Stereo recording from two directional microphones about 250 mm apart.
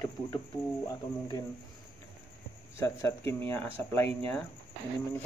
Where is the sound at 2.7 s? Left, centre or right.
Centre.